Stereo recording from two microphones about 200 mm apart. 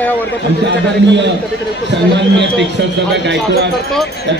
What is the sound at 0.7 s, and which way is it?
A man's voice, 60° right (ahead or behind).